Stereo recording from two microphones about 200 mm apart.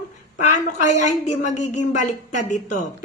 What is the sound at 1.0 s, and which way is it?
A woman's voice, 35° left (ahead or behind).